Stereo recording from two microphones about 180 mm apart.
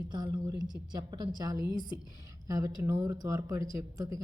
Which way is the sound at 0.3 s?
20° right (ahead or behind).